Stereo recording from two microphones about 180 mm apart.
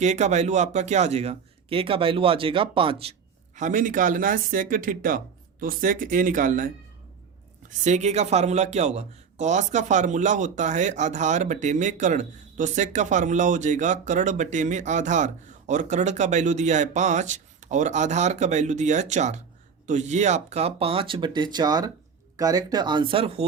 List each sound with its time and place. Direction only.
0.0 s speech: 40° right (ahead or behind)
7.7 s speech: 40° right (ahead or behind)